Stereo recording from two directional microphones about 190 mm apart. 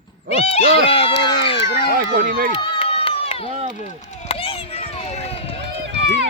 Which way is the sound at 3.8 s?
40° left (ahead or behind).